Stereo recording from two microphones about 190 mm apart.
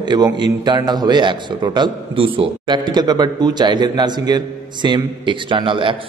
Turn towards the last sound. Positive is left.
turn(degrees=-25)  # may be behind; listen again after turning